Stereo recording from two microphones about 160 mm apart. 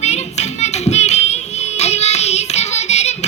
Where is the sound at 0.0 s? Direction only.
45° left (ahead or behind).